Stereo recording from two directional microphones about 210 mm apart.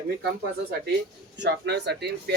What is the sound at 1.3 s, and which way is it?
Speech, 55° right (ahead or behind).